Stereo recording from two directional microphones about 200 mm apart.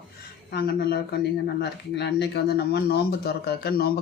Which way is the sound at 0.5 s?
50° left (ahead or behind).